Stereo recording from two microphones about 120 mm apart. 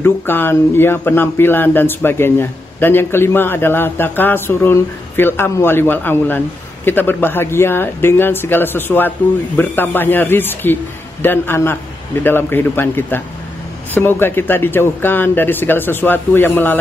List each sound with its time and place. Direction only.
0.0 s a man's voice: 20° left (ahead or behind)